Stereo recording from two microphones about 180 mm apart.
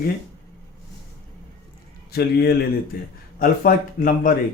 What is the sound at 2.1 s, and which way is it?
Speech, 60° left (ahead or behind).